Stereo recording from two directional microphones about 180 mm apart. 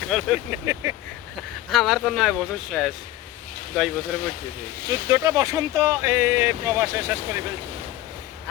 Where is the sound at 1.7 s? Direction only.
Centre (ahead or behind).